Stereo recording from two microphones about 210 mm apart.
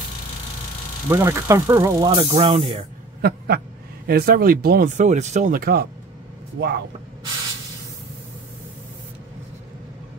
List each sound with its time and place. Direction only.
1.0 s speech: 10° right (ahead or behind)
3.2 s speech: 50° right (ahead or behind)